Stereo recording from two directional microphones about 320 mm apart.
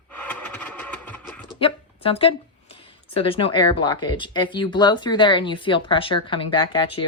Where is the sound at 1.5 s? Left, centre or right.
Centre.